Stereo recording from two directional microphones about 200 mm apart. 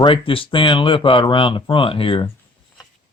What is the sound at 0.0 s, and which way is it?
Speech, 25° left (ahead or behind).